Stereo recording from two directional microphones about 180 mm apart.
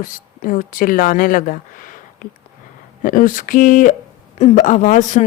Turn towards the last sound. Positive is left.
turn(degrees=45)  # may be behind; listen again after turning